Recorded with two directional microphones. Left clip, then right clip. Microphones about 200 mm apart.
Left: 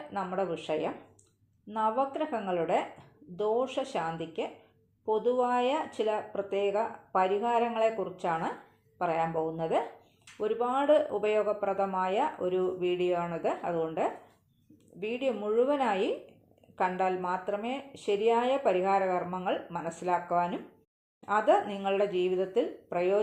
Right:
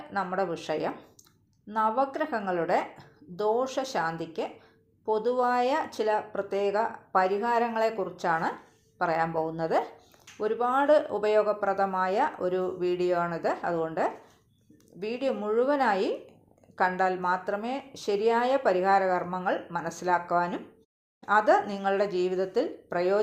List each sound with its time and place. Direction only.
0.1 s speech: 25° right (ahead or behind)